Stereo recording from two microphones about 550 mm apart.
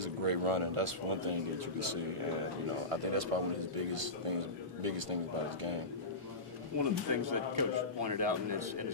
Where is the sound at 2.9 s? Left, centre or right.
Right.